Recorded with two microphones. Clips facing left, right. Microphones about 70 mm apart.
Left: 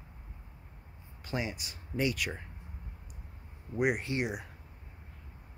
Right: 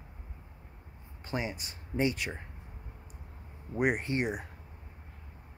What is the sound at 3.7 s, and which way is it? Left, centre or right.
Speech, right.